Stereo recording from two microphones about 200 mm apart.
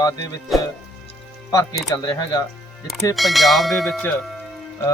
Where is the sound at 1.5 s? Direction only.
15° left (ahead or behind).